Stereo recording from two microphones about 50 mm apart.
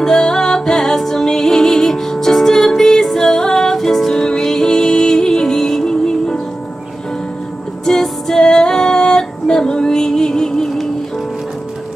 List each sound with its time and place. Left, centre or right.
0.0 s music: centre
7.8 s music: centre